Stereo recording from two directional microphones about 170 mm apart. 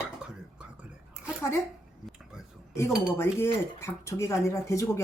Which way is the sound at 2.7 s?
15° left (ahead or behind).